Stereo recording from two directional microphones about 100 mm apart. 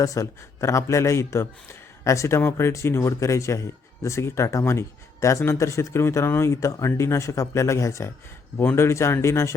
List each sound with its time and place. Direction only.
0.0 s speech: 35° left (ahead or behind)